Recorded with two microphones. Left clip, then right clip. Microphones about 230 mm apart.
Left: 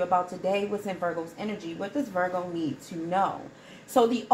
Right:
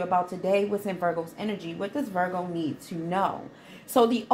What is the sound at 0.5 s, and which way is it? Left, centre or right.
A woman's voice, right.